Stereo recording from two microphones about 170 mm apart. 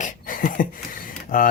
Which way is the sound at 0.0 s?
55° left (ahead or behind).